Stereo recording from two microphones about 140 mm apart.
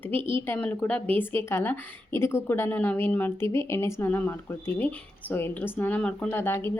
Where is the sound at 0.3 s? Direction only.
15° left (ahead or behind).